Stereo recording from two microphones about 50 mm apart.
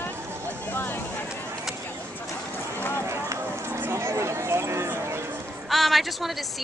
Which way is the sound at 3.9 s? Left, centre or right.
Right.